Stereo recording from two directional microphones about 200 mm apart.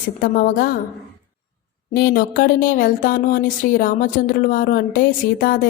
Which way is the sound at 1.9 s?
50° left (ahead or behind).